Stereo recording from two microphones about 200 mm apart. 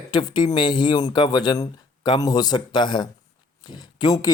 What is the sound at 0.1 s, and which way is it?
Speech, 20° left (ahead or behind).